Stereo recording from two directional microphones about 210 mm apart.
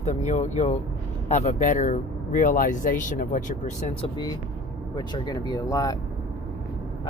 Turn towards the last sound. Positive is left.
turn(degrees=15)  # may be behind; listen again after turning